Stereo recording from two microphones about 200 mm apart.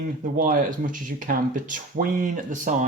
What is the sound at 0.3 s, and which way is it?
Speech, 45° right (ahead or behind).